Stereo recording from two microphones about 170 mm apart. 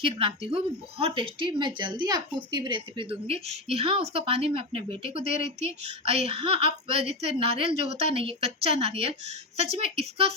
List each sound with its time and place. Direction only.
0.0 s speech: 30° right (ahead or behind)